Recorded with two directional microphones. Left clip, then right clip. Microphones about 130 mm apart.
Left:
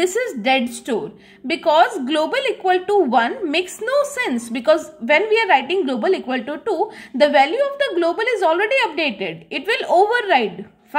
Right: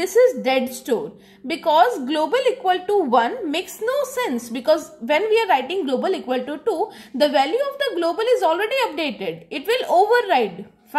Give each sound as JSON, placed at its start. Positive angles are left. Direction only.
{"t": 0.0, "sound": "a woman's voice", "side_deg": 45}
{"t": 0.4, "sound": "a woman's voice", "side_deg": 30}